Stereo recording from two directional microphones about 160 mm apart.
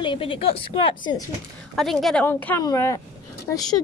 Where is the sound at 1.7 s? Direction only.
Centre (ahead or behind).